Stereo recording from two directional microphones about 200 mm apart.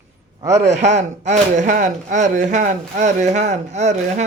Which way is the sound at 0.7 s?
35° right (ahead or behind).